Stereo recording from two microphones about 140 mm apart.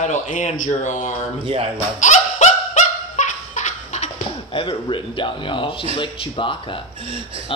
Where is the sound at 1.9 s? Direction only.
60° left (ahead or behind).